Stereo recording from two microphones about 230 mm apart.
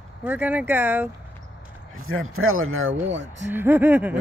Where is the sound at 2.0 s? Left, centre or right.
Right.